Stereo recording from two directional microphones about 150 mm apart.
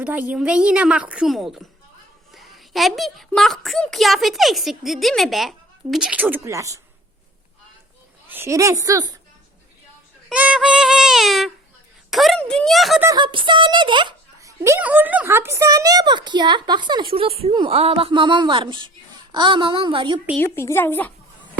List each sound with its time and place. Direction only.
0.0 s a woman's voice: 10° right (ahead or behind)
8.3 s a woman's voice: 15° right (ahead or behind)
10.2 s yodeling: 10° right (ahead or behind)
12.1 s a child's voice: centre (ahead or behind)
13.1 s speech: 35° right (ahead or behind)
20.4 s speech: 15° left (ahead or behind)